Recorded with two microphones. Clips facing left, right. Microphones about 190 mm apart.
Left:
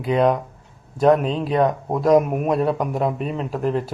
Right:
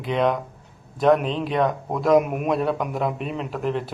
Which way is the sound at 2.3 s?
35° left (ahead or behind).